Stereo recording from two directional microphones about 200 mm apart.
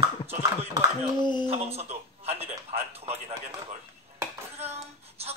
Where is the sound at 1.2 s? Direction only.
20° left (ahead or behind).